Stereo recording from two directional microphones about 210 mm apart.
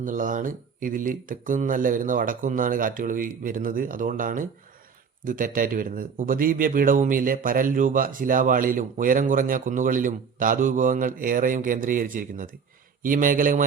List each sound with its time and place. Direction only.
0.0 s a man's voice: 40° right (ahead or behind)